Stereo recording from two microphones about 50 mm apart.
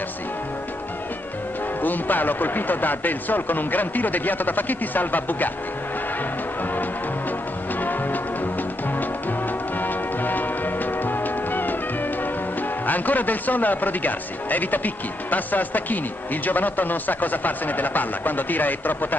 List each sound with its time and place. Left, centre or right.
1.8 s a man's voice: left
9.8 s music: left
12.8 s a man's voice: left